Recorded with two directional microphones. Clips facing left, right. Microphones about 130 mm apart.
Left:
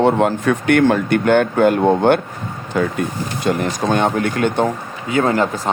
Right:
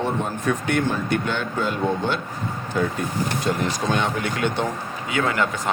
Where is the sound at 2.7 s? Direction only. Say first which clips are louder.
Left 5 dB; 80° left.